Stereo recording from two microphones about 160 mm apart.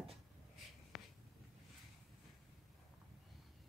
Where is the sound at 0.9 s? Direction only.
Centre (ahead or behind).